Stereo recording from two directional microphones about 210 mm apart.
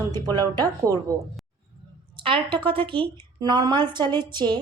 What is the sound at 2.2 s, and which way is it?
A woman's voice, 25° right (ahead or behind).